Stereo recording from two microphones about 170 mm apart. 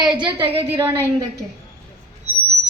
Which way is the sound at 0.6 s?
15° right (ahead or behind).